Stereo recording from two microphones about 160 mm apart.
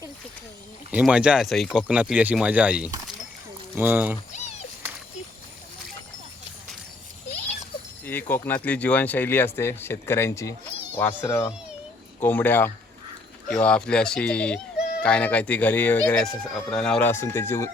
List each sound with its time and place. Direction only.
0.9 s speech: 5° right (ahead or behind)
8.0 s speech: 10° left (ahead or behind)